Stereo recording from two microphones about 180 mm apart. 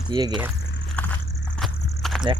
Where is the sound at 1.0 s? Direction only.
10° left (ahead or behind).